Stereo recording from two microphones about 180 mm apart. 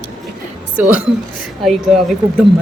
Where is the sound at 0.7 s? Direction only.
5° right (ahead or behind).